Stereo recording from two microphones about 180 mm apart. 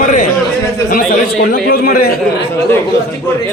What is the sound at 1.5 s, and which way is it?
Speech, 55° left (ahead or behind).